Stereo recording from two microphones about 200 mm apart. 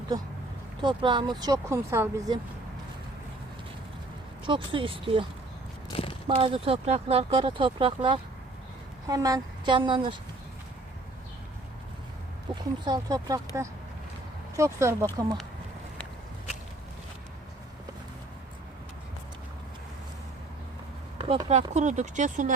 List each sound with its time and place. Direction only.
0.1 s speech: 20° right (ahead or behind)
4.4 s speech: 25° right (ahead or behind)
5.9 s a sound: 25° left (ahead or behind)
6.2 s speech: 25° right (ahead or behind)
12.5 s speech: 25° right (ahead or behind)
14.5 s speech: 15° right (ahead or behind)
21.2 s speech: 30° right (ahead or behind)